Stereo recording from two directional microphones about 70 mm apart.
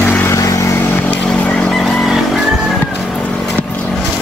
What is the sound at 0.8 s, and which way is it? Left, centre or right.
Vehicle, left.